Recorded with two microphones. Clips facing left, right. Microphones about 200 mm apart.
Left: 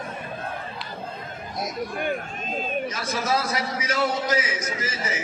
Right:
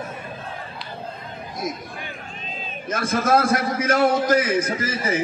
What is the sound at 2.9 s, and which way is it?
A man's voice, 50° right (ahead or behind).